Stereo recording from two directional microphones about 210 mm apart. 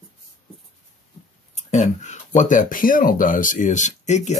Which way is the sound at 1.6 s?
35° left (ahead or behind).